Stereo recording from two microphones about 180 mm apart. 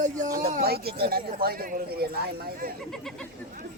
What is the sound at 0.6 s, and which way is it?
Speech, 60° right (ahead or behind).